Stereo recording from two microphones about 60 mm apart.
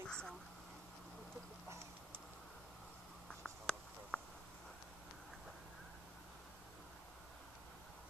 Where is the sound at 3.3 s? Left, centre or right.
Centre.